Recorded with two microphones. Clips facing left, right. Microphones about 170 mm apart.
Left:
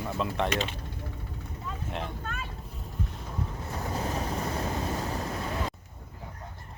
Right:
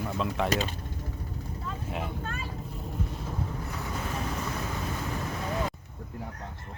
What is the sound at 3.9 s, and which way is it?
Vehicle, 35° left (ahead or behind).